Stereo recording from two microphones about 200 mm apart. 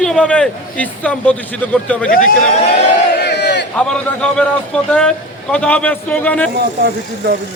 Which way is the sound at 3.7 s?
5° left (ahead or behind).